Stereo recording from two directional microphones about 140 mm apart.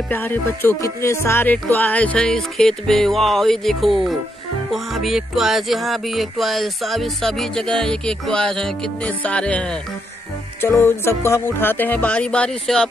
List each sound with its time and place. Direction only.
0.1 s music: 15° left (ahead or behind)